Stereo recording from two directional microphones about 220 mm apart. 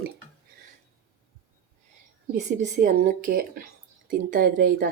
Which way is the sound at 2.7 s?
35° right (ahead or behind).